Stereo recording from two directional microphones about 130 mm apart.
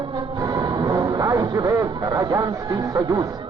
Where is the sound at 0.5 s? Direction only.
30° right (ahead or behind).